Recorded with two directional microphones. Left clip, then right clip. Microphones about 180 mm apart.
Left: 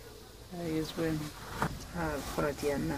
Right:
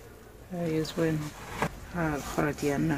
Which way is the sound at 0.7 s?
60° right (ahead or behind).